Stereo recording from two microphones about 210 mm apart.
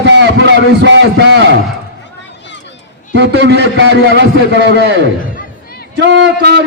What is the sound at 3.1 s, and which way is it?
A man's voice, 55° right (ahead or behind).